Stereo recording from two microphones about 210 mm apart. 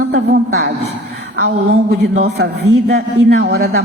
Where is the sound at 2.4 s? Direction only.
50° right (ahead or behind).